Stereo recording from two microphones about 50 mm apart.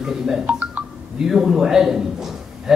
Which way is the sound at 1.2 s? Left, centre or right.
Centre.